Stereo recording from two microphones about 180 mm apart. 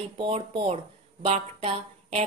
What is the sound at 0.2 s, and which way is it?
Speech, 35° right (ahead or behind).